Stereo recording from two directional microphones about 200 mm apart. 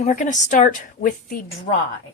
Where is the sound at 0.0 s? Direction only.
35° left (ahead or behind).